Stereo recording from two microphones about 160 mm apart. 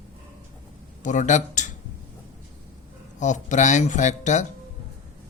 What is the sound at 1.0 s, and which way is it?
Speech, 50° left (ahead or behind).